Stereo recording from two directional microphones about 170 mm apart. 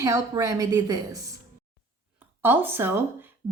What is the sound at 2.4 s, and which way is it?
Speech, 10° right (ahead or behind).